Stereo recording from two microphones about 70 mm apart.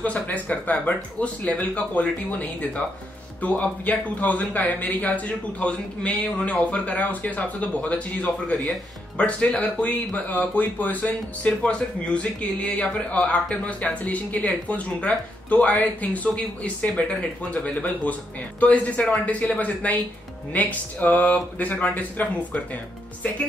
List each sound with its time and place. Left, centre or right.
0.0 s a man's voice: left